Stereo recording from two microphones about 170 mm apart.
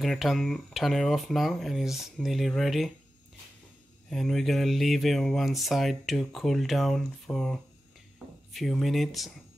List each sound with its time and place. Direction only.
0.0 s speech: centre (ahead or behind)
4.1 s speech: centre (ahead or behind)